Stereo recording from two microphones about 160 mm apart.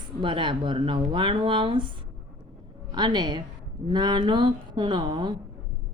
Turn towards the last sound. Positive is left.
turn(degrees=-30)  # may be behind; listen again after turning